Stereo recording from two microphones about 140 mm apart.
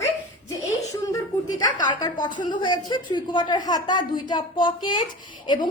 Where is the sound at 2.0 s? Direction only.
30° left (ahead or behind).